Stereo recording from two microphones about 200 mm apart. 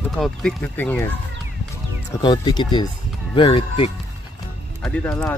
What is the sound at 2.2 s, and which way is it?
Speech, 20° left (ahead or behind).